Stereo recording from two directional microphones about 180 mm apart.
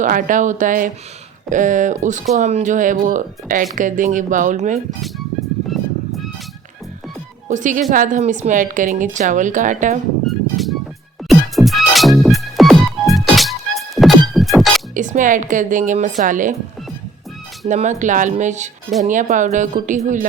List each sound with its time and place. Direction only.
0.0 s speech: 45° right (ahead or behind)
5.7 s music: centre (ahead or behind)
7.4 s speech: 45° right (ahead or behind)
10.2 s music: centre (ahead or behind)
14.9 s speech: 45° right (ahead or behind)
17.7 s speech: 40° right (ahead or behind)